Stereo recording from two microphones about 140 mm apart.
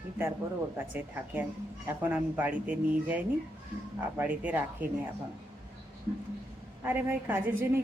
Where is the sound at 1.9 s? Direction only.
10° right (ahead or behind).